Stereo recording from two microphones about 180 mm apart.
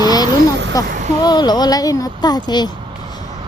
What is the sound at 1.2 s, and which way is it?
A woman's voice, 25° left (ahead or behind).